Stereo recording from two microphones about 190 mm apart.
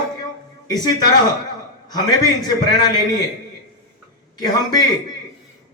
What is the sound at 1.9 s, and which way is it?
A man's voice, 20° left (ahead or behind).